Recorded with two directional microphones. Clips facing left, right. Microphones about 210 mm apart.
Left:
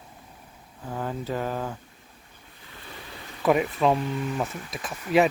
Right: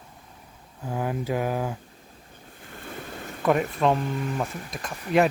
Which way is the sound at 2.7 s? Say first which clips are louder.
Right 6 dB; 50° right (ahead or behind).